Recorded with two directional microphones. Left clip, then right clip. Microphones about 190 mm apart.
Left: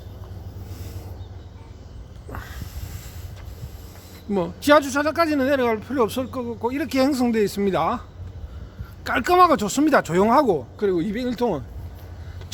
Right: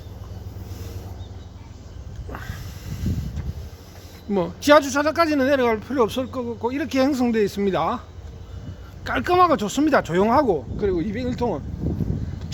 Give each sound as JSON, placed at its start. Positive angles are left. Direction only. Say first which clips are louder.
{"t": 2.3, "sound": "a sound", "louder": "right 1 dB", "side_deg": 0}
{"t": 4.3, "sound": "speech", "louder": "right 1 dB", "side_deg": 5}
{"t": 9.0, "sound": "speech", "louder": "left 1 dB", "side_deg": 15}